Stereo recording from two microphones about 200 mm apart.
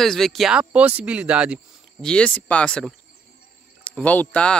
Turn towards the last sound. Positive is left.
turn(degrees=5)  # may be behind; listen again after turning